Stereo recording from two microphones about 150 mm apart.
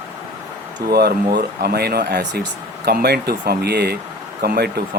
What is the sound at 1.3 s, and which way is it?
Speech, 85° right.